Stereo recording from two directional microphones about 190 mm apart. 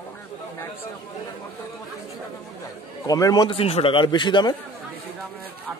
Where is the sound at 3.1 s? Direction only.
20° left (ahead or behind).